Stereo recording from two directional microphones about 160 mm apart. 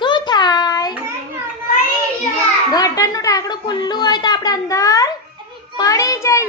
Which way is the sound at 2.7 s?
20° left (ahead or behind).